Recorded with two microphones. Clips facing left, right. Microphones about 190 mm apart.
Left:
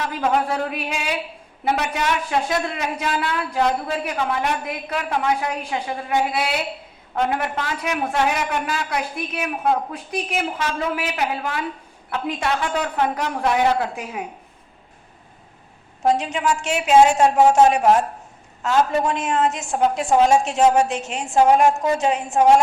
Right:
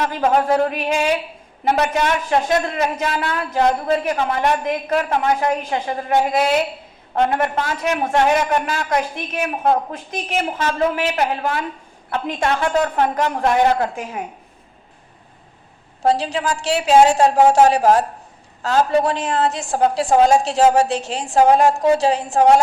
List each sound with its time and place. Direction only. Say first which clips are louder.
0.0 s a woman's voice: right 4 dB; 50° right (ahead or behind)
16.0 s a woman's voice: right 1 dB; 35° right (ahead or behind)